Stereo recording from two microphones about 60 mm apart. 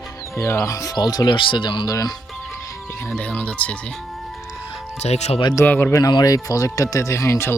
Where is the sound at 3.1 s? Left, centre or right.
Left.